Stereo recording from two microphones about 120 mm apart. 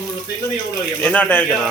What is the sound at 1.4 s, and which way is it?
Speech, centre (ahead or behind).